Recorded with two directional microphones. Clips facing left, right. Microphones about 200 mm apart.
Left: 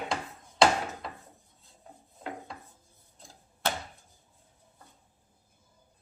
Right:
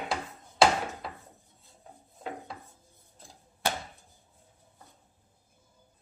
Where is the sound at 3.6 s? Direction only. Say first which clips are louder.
Even; 10° right (ahead or behind).